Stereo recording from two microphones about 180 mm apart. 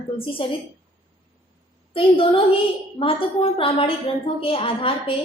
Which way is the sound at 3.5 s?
30° left (ahead or behind).